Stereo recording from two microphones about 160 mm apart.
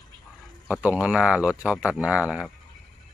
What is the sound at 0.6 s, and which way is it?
Speech, 10° right (ahead or behind).